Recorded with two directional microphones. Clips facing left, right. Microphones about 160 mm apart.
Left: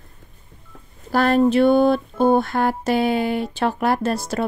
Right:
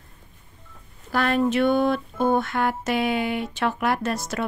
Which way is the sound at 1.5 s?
35° left (ahead or behind).